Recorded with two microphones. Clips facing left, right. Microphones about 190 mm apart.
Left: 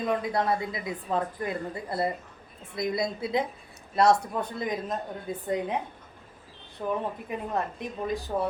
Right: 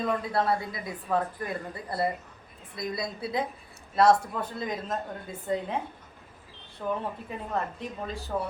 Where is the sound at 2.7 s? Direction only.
20° left (ahead or behind).